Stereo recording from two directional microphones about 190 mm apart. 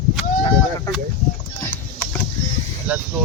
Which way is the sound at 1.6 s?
10° left (ahead or behind).